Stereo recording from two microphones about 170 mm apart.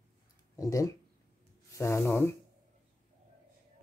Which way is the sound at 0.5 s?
20° left (ahead or behind).